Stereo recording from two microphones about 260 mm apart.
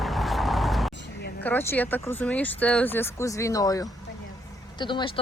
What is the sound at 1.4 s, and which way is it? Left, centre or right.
Speech, centre.